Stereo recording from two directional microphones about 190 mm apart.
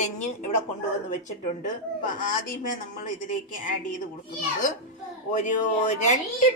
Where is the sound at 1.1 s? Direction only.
40° left (ahead or behind).